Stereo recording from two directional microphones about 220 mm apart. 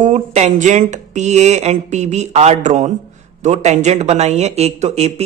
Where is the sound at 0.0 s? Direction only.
30° right (ahead or behind).